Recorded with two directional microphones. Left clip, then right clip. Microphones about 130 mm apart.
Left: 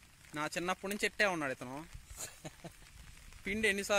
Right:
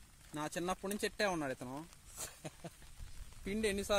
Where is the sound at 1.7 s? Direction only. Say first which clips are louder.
Left 1 dB; 5° left (ahead or behind).